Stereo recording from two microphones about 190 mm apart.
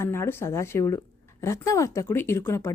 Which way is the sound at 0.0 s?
15° left (ahead or behind).